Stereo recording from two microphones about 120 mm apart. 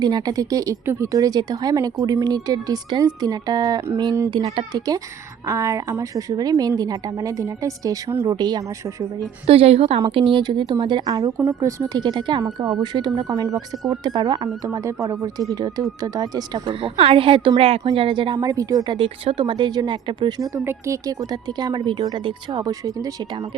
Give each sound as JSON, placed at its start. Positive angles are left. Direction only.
{"t": 0.0, "sound": "a woman's voice", "side_deg": -35}
{"t": 4.4, "sound": "a woman's voice", "side_deg": -45}
{"t": 5.5, "sound": "a woman's voice", "side_deg": -25}
{"t": 9.5, "sound": "a woman's voice", "side_deg": -55}
{"t": 10.3, "sound": "speech", "side_deg": -40}
{"t": 16.6, "sound": "a woman's voice", "side_deg": -55}
{"t": 18.4, "sound": "speech", "side_deg": -30}
{"t": 18.9, "sound": "speech", "side_deg": -50}
{"t": 20.7, "sound": "speech", "side_deg": -25}